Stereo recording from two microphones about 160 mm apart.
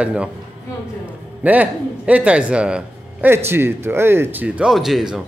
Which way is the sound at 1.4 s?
10° right (ahead or behind).